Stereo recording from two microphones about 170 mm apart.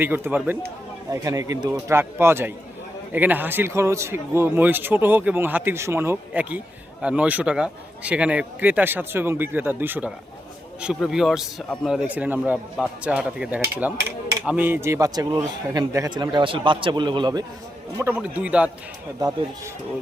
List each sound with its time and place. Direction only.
0.0 s a man's voice: 10° right (ahead or behind)
17.9 s a man's voice: 10° right (ahead or behind)